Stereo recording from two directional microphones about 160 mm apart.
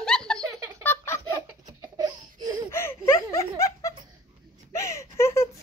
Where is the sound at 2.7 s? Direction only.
15° left (ahead or behind).